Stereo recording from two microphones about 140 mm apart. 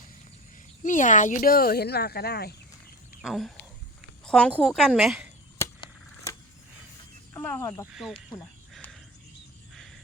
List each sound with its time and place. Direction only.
0.8 s speech: 65° left (ahead or behind); by 2.1 s 90° left
3.2 s a woman's voice: centre (ahead or behind)
7.3 s speech: 15° left (ahead or behind)
9.7 s wild animals: centre (ahead or behind)